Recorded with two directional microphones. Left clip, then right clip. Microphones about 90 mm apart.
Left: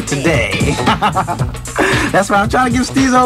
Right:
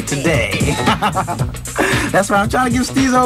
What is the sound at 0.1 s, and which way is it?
Speech, 45° right (ahead or behind).